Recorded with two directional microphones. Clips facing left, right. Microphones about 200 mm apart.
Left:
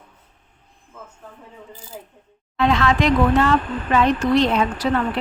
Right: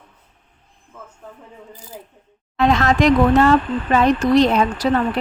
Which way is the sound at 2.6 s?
45° right (ahead or behind).